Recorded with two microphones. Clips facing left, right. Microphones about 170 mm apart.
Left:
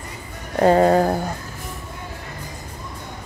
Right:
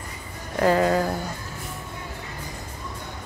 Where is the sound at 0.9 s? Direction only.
50° left (ahead or behind).